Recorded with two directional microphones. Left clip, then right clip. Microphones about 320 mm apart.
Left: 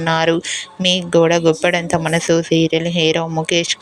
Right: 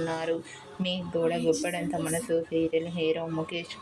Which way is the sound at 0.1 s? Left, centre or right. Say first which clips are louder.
Left 15 dB; left.